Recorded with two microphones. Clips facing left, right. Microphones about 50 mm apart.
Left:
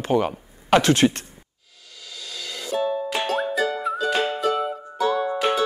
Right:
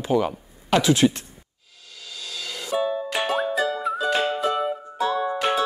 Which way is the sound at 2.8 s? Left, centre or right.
Centre.